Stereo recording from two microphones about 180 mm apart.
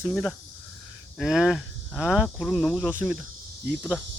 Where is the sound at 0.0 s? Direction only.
Centre (ahead or behind).